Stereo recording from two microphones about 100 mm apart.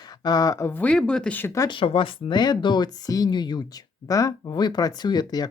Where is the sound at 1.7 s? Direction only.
60° left (ahead or behind); by 5.5 s 40° left (ahead or behind).